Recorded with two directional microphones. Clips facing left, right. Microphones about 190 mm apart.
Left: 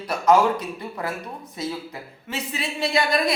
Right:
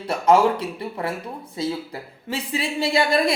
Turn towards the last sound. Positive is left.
turn(degrees=-25)  # may be behind; listen again after turning